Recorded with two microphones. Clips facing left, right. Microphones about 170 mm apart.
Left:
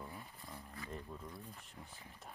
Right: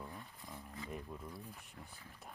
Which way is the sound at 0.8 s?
15° right (ahead or behind).